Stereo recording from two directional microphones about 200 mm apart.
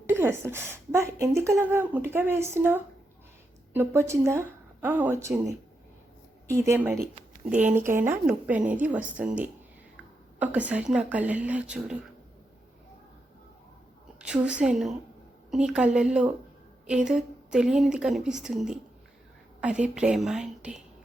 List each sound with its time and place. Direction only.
0.1 s a woman's voice: 10° right (ahead or behind)
14.2 s a woman's voice: 5° right (ahead or behind)